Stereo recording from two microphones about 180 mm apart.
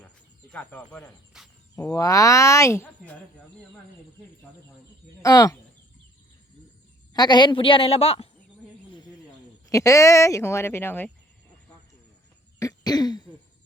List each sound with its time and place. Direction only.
0.5 s speech: 5° left (ahead or behind)
1.7 s speech: 15° left (ahead or behind)
5.2 s a woman's voice: 20° left (ahead or behind)
7.1 s a woman's voice: 25° left (ahead or behind)
9.6 s speech: 15° left (ahead or behind)
12.5 s throat clearing: 20° left (ahead or behind)